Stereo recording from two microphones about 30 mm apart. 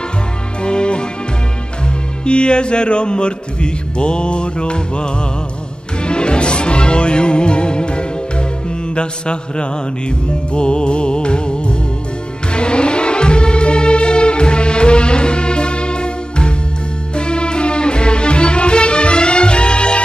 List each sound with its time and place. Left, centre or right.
0.6 s music: left
2.2 s speech: left
6.0 s music: left